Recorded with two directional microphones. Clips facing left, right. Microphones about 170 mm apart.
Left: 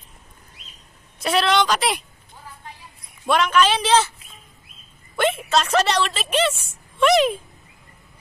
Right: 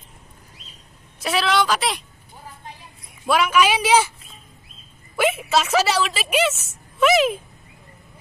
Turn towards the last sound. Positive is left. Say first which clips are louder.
# even
turn(degrees=-5)  # may be behind; listen again after turning